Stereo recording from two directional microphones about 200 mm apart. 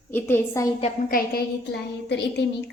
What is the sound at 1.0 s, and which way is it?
Speech, 45° left (ahead or behind).